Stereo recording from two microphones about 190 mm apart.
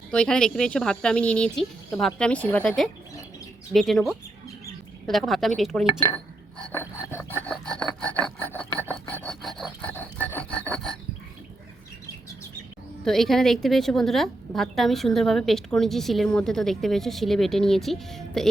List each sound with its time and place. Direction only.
0.1 s a woman's voice: 5° left (ahead or behind)
6.0 s speech: 15° left (ahead or behind)
7.1 s filing: 10° left (ahead or behind)
13.1 s a woman's voice: centre (ahead or behind)